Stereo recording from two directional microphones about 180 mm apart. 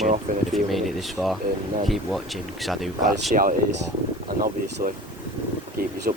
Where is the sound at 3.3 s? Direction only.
50° right (ahead or behind).